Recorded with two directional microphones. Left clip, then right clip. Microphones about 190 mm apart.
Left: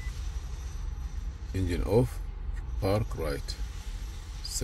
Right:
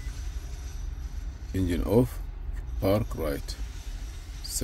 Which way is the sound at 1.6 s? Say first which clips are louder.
Right 2 dB; 20° right (ahead or behind).